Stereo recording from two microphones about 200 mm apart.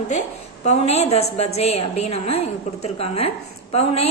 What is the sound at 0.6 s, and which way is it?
A woman's voice, 35° left (ahead or behind).